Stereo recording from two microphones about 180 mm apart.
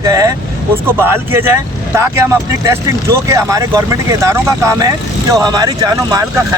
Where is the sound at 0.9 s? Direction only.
10° right (ahead or behind).